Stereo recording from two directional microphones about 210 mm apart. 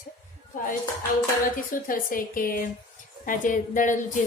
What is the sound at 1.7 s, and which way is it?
A woman's voice, 40° left (ahead or behind).